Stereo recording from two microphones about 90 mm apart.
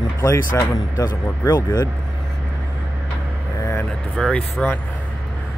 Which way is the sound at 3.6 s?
30° left (ahead or behind).